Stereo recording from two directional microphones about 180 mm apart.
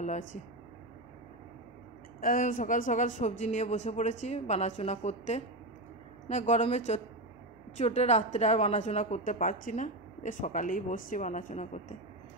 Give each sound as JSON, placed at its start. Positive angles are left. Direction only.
{"t": 2.1, "sound": "a woman's voice", "side_deg": 50}